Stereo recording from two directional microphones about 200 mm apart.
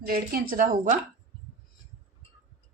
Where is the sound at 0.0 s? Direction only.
45° right (ahead or behind).